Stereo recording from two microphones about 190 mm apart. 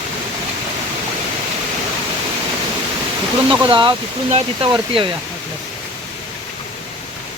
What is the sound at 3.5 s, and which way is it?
Speech, 25° right (ahead or behind).